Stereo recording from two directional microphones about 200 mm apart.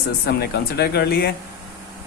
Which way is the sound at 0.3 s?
55° left (ahead or behind).